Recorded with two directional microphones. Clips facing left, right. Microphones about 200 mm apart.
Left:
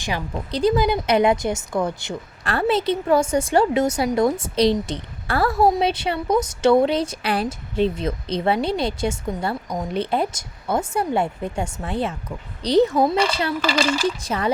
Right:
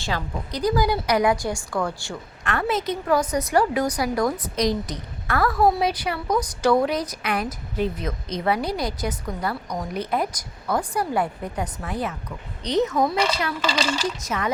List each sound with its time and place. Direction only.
0.5 s a woman's voice: 25° left (ahead or behind)
2.4 s a woman's voice: 30° left (ahead or behind)